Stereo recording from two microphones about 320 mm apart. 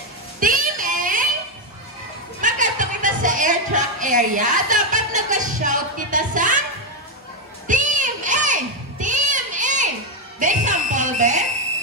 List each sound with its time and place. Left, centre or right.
0.4 s child singing: right
2.4 s music: right
7.6 s a sound: right
10.4 s fire alarm: right